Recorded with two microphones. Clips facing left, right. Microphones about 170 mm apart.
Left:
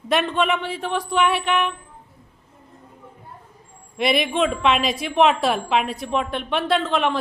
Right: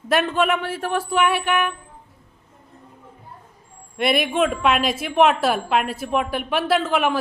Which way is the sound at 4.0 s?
Centre (ahead or behind).